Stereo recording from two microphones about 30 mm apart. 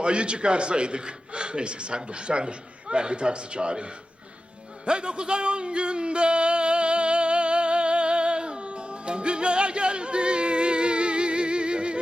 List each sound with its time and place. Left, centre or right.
0.0 s a man's voice: right
4.9 s music: right